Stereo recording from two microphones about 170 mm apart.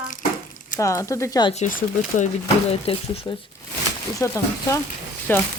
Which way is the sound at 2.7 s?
35° left (ahead or behind).